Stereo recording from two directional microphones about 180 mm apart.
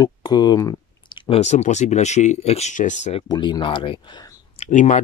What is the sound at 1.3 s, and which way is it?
Speech, 40° left (ahead or behind).